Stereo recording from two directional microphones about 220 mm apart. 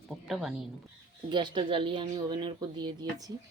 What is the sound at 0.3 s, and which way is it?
Speech, centre (ahead or behind).